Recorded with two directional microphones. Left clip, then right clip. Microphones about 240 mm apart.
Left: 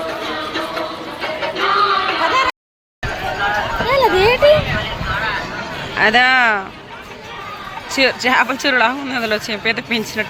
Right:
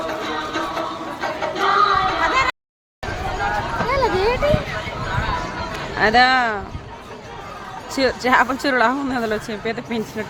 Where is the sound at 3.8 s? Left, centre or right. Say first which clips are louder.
Left 6 dB; left.